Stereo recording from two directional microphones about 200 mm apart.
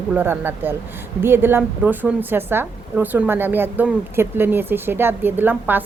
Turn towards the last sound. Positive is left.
turn(degrees=-10)  # may be behind; listen again after turning